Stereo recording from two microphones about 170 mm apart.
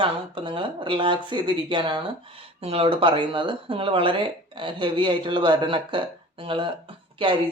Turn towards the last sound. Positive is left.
turn(degrees=-30)  # may be behind; listen again after turning